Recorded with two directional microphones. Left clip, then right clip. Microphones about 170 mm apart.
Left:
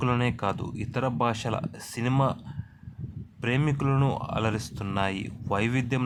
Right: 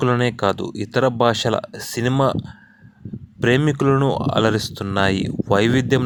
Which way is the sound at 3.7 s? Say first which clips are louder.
Right 10 dB; 40° right (ahead or behind).